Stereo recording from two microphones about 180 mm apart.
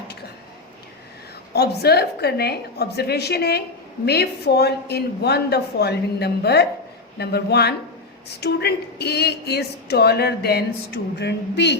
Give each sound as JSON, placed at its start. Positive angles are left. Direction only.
{"t": 1.5, "sound": "speech", "side_deg": 60}